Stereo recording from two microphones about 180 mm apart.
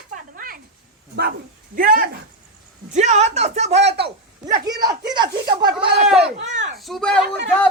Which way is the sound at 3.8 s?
70° right (ahead or behind).